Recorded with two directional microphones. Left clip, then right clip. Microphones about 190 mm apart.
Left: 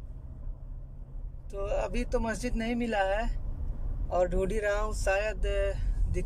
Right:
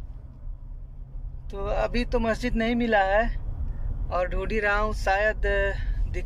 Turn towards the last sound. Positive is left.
turn(degrees=0)  # may be behind; listen again after turning